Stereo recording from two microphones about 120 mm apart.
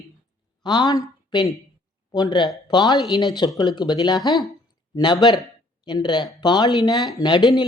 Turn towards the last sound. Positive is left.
turn(degrees=40)  # may be behind; listen again after turning